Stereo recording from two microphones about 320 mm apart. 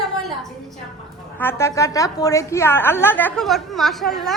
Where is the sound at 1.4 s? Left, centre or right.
Centre.